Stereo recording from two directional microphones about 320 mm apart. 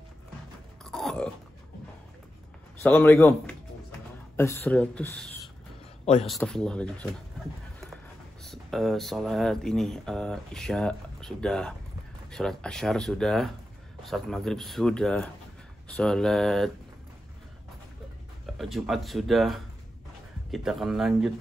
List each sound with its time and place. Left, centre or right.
0.8 s grunt: centre
2.8 s a man's voice: centre
8.5 s speech: centre
18.6 s speech: centre